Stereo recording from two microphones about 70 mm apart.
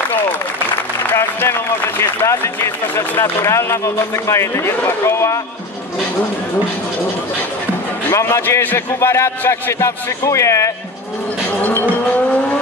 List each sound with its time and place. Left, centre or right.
1.1 s speech: left
8.1 s a man's voice: left
8.4 s a man's voice: left